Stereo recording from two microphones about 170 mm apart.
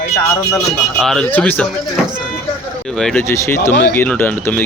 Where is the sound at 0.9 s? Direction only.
Centre (ahead or behind).